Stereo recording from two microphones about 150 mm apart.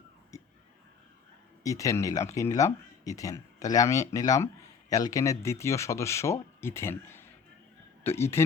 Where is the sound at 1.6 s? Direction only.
20° left (ahead or behind).